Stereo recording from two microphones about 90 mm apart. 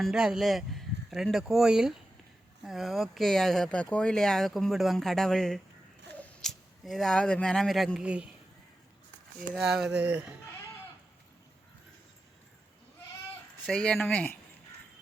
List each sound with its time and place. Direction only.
0.0 s speech: 5° right (ahead or behind)
7.9 s speech: 10° right (ahead or behind)
9.6 s speech: 5° right (ahead or behind)
10.0 s speech: 15° right (ahead or behind)
13.7 s speech: 10° left (ahead or behind)